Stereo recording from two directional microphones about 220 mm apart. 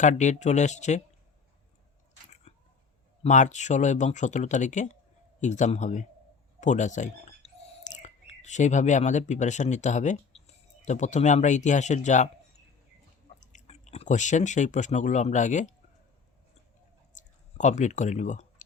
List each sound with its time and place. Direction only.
0.0 s speech: 35° left (ahead or behind)
2.5 s a sound: 30° left (ahead or behind)
3.2 s speech: 35° left (ahead or behind)
13.4 s speech: 35° left (ahead or behind)
17.2 s speech: 35° left (ahead or behind)